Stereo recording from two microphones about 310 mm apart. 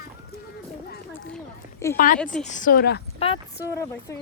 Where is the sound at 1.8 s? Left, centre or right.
Centre.